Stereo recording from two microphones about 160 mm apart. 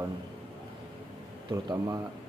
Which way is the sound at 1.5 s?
20° right (ahead or behind).